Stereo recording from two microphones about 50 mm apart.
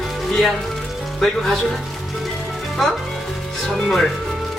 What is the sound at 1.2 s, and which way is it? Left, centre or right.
Speech, centre.